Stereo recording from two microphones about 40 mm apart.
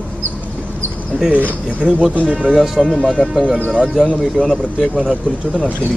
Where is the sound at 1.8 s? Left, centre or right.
Right.